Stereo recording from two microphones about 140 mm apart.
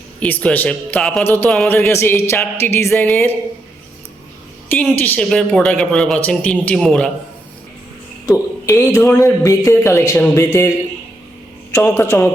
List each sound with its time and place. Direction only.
0.2 s a man's voice: 10° left (ahead or behind)
4.7 s a man's voice: 10° left (ahead or behind)
8.8 s speech: 15° left (ahead or behind)
11.7 s a man's voice: 15° left (ahead or behind)